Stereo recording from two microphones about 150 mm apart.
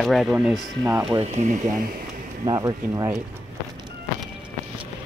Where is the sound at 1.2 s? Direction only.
50° right (ahead or behind).